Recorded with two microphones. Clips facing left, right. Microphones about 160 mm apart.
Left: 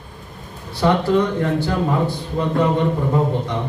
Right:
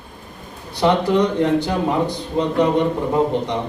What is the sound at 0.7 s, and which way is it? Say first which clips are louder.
A man's voice: even; 20° right (ahead or behind).